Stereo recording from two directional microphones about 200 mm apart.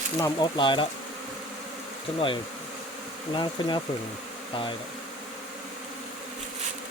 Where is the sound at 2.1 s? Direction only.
25° left (ahead or behind).